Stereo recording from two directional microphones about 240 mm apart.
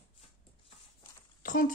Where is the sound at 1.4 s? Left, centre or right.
Left.